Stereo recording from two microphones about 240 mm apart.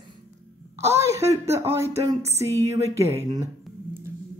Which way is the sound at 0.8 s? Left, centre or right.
Centre.